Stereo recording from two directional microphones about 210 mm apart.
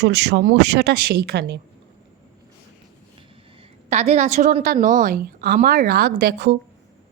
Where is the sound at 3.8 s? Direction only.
30° right (ahead or behind).